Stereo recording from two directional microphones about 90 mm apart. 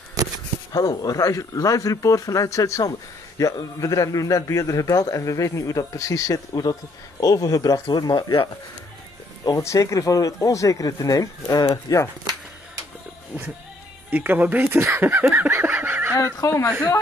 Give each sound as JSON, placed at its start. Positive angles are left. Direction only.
{"t": 0.7, "sound": "a man's voice", "side_deg": 45}
{"t": 9.6, "sound": "a man's voice", "side_deg": 35}
{"t": 14.1, "sound": "speech", "side_deg": -20}
{"t": 15.3, "sound": "a sound", "side_deg": -25}
{"t": 16.2, "sound": "a man's voice", "side_deg": 35}